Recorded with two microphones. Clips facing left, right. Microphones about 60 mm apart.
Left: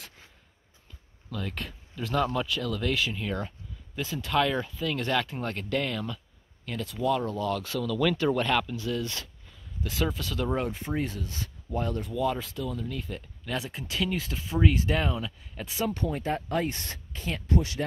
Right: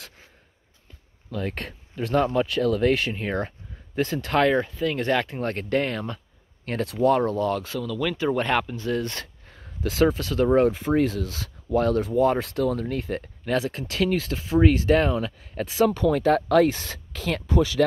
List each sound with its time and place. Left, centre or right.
1.3 s speech: right
4.5 s speech: right
7.8 s speech: centre
8.4 s speech: right
10.1 s speech: right
10.8 s speech: right
12.1 s speech: right
14.3 s speech: right
15.6 s speech: right
17.1 s speech: right